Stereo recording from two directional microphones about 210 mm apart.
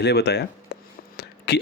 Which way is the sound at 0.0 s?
50° left (ahead or behind).